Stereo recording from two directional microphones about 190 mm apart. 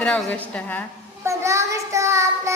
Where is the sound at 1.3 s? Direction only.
15° right (ahead or behind).